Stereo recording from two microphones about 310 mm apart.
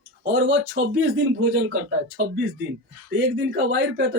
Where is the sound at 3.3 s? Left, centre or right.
Right.